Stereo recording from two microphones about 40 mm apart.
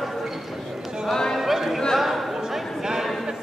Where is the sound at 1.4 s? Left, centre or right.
Centre.